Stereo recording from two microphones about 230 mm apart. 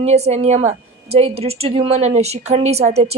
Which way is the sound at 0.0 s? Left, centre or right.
Right.